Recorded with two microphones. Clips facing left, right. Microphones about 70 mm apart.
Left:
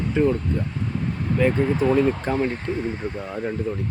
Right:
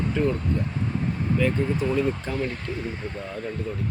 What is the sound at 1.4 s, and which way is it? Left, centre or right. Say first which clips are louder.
Speech: left 5 dB; left.